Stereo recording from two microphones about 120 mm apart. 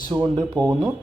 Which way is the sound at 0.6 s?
35° right (ahead or behind).